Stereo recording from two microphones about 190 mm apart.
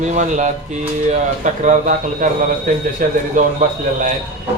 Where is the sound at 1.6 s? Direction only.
40° right (ahead or behind).